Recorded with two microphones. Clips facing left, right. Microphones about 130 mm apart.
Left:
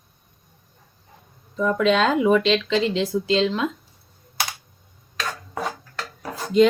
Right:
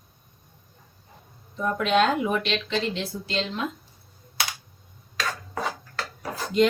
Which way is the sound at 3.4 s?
90° left.